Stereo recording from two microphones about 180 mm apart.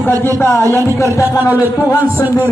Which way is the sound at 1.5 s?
10° right (ahead or behind).